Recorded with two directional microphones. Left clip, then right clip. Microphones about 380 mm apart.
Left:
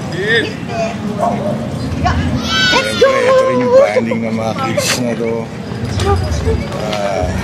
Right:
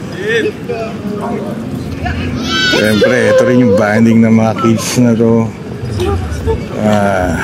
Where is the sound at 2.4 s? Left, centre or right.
Centre.